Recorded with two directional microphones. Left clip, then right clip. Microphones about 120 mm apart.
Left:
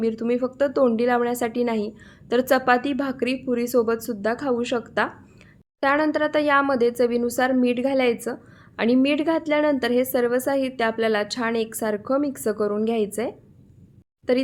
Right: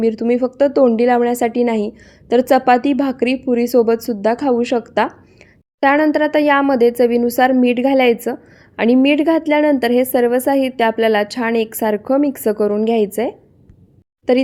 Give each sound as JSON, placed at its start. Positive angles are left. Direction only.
{"t": 0.0, "sound": "speech", "side_deg": -25}